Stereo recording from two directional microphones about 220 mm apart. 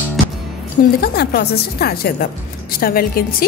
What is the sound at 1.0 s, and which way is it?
A woman's voice, 45° left (ahead or behind).